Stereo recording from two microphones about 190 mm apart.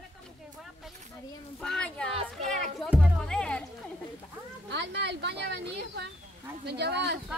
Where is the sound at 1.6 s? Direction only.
5° left (ahead or behind).